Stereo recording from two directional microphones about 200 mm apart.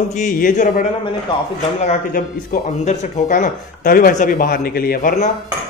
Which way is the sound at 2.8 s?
35° left (ahead or behind).